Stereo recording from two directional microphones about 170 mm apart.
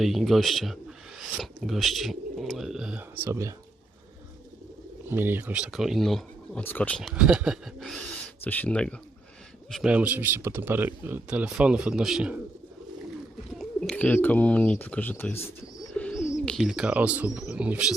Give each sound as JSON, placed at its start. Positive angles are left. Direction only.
{"t": 0.0, "sound": "speech", "side_deg": 0}
{"t": 3.2, "sound": "speech", "side_deg": -20}
{"t": 5.0, "sound": "speech", "side_deg": -10}
{"t": 9.9, "sound": "speech", "side_deg": -10}
{"t": 13.6, "sound": "speech", "side_deg": 5}
{"t": 16.0, "sound": "bird", "side_deg": 5}
{"t": 16.5, "sound": "speech", "side_deg": 0}